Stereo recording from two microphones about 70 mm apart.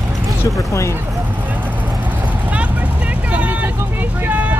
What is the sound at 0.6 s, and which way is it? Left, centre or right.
Speech, left.